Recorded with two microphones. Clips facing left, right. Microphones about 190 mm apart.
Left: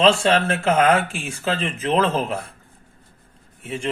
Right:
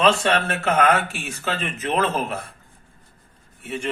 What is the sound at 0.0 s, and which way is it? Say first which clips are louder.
Speech: left 2 dB; 25° left (ahead or behind).